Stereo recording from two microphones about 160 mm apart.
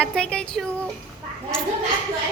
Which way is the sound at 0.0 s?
5° left (ahead or behind).